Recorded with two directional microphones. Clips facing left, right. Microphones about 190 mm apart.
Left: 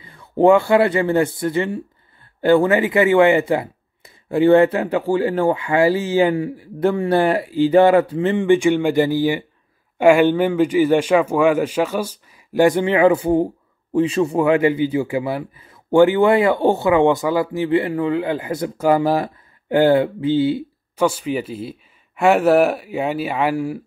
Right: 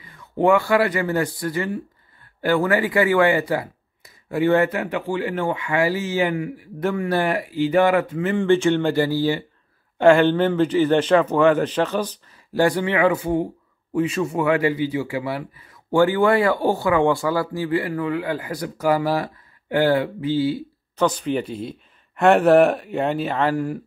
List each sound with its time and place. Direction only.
0.0 s a man's voice: 30° left (ahead or behind)
8.4 s speech: 15° left (ahead or behind)
12.6 s a man's voice: 25° left (ahead or behind)
20.9 s speech: 10° left (ahead or behind)